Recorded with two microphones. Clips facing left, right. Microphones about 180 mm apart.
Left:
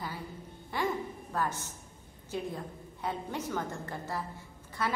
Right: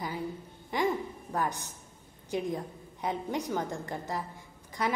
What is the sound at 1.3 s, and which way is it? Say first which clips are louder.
A woman's voice: right 2 dB; 15° right (ahead or behind).